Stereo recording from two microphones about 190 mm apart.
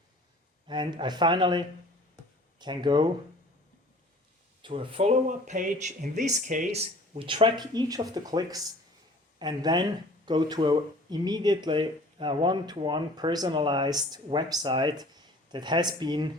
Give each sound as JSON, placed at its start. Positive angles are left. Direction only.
{"t": 0.7, "sound": "speech", "side_deg": -25}
{"t": 4.6, "sound": "speech", "side_deg": -30}